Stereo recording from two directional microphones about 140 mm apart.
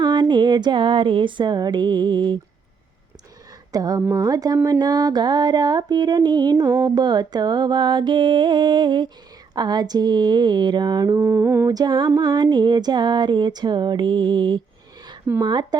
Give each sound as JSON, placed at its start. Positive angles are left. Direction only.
{"t": 0.0, "sound": "speech", "side_deg": -35}
{"t": 3.7, "sound": "speech", "side_deg": -25}
{"t": 4.1, "sound": "a sound", "side_deg": -25}
{"t": 9.6, "sound": "humming", "side_deg": -30}
{"t": 11.2, "sound": "humming", "side_deg": -15}
{"t": 15.4, "sound": "a sound", "side_deg": -30}